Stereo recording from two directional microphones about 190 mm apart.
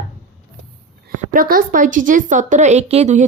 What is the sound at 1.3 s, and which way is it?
A woman's voice, 50° right (ahead or behind).